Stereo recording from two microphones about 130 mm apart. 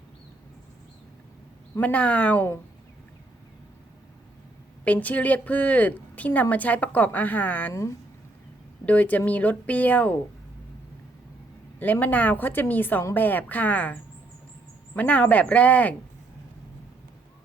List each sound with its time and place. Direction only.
1.7 s a woman's voice: 10° left (ahead or behind)
4.9 s a woman's voice: 10° left (ahead or behind)
8.9 s a woman's voice: 10° left (ahead or behind)
11.8 s a woman's voice: 15° left (ahead or behind)